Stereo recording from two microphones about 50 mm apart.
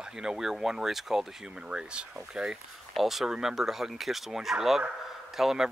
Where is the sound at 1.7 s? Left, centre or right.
Centre.